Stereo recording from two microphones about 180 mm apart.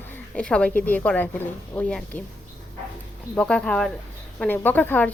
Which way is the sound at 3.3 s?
5° left (ahead or behind).